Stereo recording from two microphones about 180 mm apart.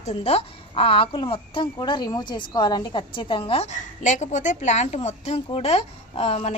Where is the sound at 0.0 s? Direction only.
35° left (ahead or behind).